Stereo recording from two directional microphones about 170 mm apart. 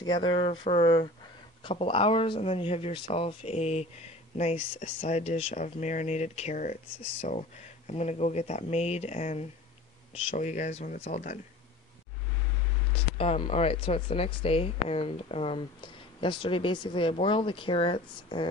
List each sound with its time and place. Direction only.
0.0 s speech: 25° left (ahead or behind); by 11.3 s 45° left (ahead or behind)
12.9 s speech: 35° left (ahead or behind)